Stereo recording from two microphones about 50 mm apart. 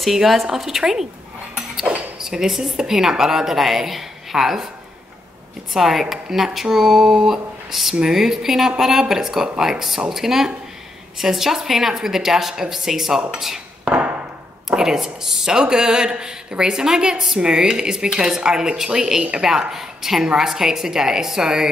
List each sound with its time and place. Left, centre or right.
0.0 s speech: centre
2.1 s a woman's voice: centre
5.7 s a woman's voice: centre
13.8 s a sound: right
14.7 s a woman's voice: centre